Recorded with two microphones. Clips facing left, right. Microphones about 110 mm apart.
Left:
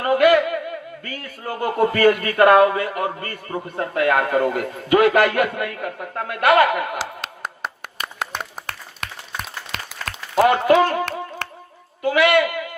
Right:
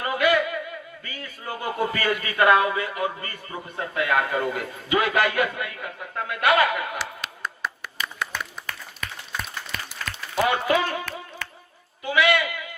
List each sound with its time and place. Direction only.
0.0 s speech: 55° left (ahead or behind)
7.0 s clapping: 65° left (ahead or behind)
10.1 s a man's voice: 50° left (ahead or behind)
11.4 s a sound: 70° left (ahead or behind)
12.0 s a woman's voice: 55° left (ahead or behind)